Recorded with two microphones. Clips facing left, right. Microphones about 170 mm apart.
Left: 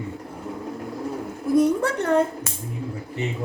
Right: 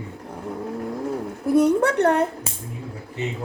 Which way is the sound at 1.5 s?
60° right (ahead or behind).